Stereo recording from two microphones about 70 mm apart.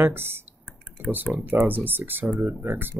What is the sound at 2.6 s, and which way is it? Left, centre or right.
Speech, right.